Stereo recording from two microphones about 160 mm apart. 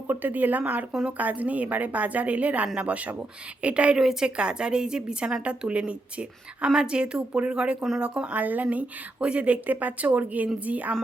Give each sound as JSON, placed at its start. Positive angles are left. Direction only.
{"t": 0.1, "sound": "speech", "side_deg": -10}